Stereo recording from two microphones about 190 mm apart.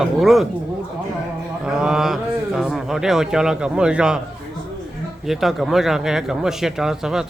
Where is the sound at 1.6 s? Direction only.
5° right (ahead or behind).